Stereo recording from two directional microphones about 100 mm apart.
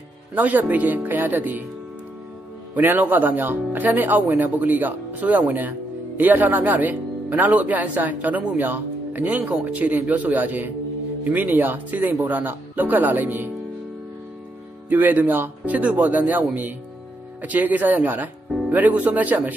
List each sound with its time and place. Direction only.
0.3 s speech: 15° right (ahead or behind)
2.7 s speech: 20° right (ahead or behind)
14.9 s speech: 15° right (ahead or behind)